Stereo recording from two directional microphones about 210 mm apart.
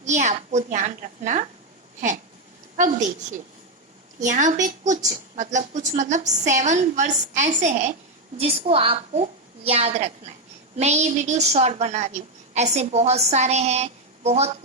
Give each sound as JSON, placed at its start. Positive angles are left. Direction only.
{"t": 0.0, "sound": "a woman's voice", "side_deg": -35}
{"t": 2.7, "sound": "a woman's voice", "side_deg": -35}
{"t": 4.2, "sound": "a woman's voice", "side_deg": -35}